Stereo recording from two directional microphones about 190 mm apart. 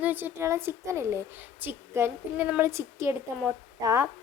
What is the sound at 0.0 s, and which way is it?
A woman's voice, 10° right (ahead or behind).